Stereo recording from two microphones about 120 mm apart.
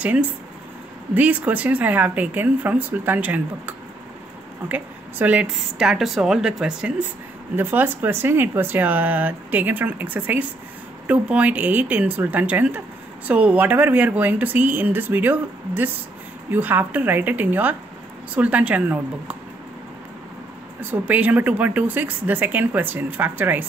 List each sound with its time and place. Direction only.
1.1 s speech: 15° right (ahead or behind)
21.1 s speech: 15° right (ahead or behind)